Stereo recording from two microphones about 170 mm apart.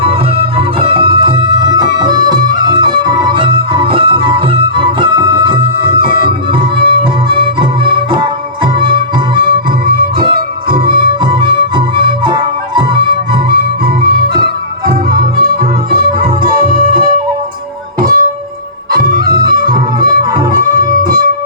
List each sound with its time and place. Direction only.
0.0 s music: 35° right (ahead or behind)
9.8 s music: 55° right (ahead or behind)
10.8 s music: 30° right (ahead or behind)
13.8 s music: 60° right (ahead or behind)